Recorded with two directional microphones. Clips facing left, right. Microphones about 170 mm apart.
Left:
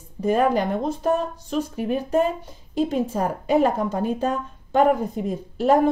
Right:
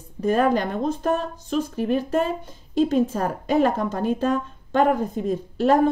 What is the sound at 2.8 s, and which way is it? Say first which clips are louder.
A woman's voice: right 2 dB; 10° left (ahead or behind).